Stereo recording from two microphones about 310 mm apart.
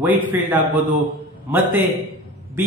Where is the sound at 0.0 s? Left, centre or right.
Centre.